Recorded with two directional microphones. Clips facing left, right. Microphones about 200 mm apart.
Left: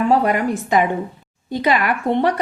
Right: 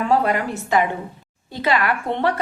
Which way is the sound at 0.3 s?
15° left (ahead or behind).